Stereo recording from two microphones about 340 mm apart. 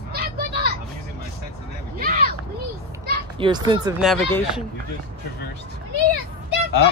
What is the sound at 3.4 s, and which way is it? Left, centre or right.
Speech, centre.